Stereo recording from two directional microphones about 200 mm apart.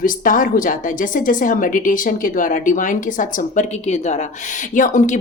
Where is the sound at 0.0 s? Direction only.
45° left (ahead or behind).